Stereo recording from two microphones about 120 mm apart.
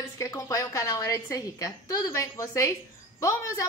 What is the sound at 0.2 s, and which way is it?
A woman's voice, 25° left (ahead or behind).